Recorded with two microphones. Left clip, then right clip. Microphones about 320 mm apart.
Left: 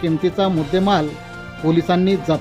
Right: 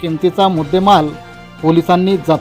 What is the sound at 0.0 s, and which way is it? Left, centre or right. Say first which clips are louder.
Speech: right 5 dB; centre.